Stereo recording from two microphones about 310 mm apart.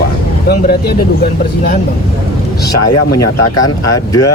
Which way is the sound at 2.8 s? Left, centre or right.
Left.